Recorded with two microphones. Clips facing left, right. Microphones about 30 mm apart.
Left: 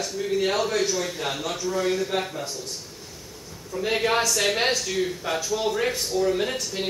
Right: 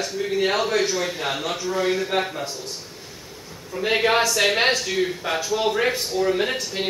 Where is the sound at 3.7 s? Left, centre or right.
Right.